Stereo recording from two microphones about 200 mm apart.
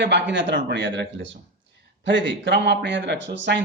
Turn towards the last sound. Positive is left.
turn(degrees=-60)  # may be behind; listen again after turning